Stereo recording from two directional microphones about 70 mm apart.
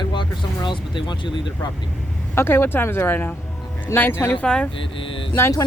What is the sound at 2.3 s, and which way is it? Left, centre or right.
Speech, left.